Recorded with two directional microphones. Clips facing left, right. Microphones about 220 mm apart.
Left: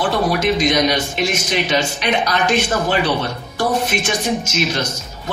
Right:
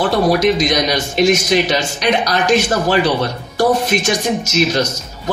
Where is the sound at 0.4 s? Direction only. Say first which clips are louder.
Right 1 dB; 40° right (ahead or behind).